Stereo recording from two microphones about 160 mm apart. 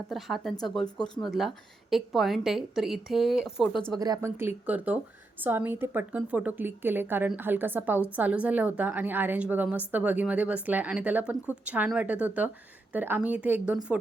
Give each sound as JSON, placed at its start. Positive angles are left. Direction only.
{"t": 0.1, "sound": "a woman's voice", "side_deg": 0}
{"t": 3.9, "sound": "a woman's voice", "side_deg": -25}